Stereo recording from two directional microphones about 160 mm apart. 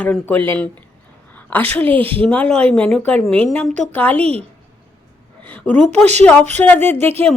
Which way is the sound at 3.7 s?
45° right (ahead or behind).